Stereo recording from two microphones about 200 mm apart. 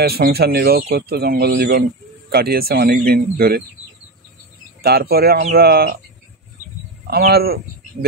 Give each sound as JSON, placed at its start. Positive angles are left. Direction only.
{"t": 0.0, "sound": "speech", "side_deg": -50}
{"t": 4.8, "sound": "speech", "side_deg": -50}
{"t": 7.1, "sound": "speech", "side_deg": -50}